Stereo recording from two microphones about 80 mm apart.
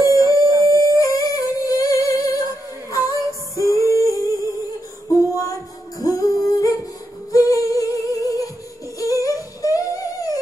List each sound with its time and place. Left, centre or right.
0.0 s howl: left
0.3 s howl: right
0.9 s music: left
5.4 s music: left
7.3 s humming: left
9.0 s a sound: left